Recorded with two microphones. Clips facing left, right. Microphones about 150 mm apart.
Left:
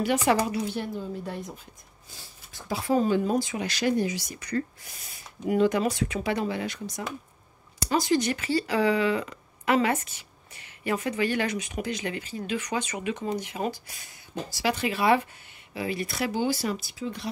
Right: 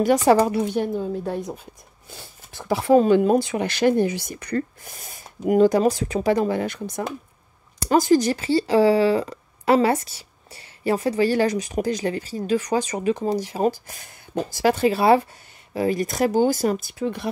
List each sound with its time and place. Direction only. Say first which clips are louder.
0.0 s speech: right 7 dB; 40° right (ahead or behind)
0.5 s speech: right 7 dB; 55° right (ahead or behind)
2.0 s speech: right 7 dB; 65° right (ahead or behind)